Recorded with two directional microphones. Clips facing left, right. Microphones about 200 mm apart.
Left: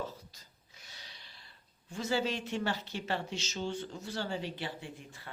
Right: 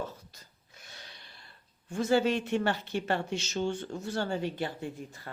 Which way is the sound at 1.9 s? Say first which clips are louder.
Right 7 dB; 55° right (ahead or behind).